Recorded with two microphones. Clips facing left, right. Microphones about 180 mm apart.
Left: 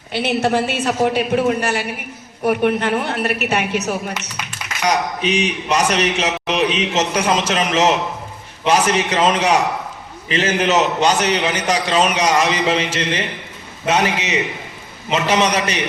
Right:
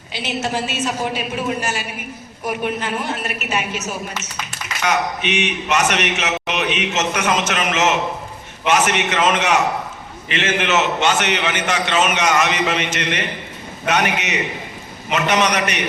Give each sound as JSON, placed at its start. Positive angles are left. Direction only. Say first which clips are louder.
{"t": 0.1, "sound": "a woman's voice", "louder": "left 6 dB", "side_deg": 60}
{"t": 4.9, "sound": "a man's voice", "louder": "left 2 dB", "side_deg": 35}